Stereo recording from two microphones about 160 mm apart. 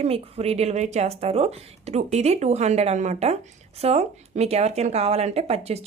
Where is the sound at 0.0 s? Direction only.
40° right (ahead or behind).